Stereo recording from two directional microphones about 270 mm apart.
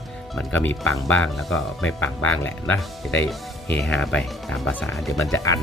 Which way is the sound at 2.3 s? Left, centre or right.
Centre.